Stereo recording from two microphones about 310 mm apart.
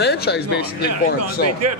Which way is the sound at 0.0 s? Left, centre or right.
Left.